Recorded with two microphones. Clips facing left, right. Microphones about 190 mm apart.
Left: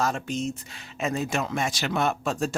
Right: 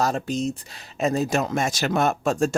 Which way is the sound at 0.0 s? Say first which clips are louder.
Right 3 dB; 35° right (ahead or behind).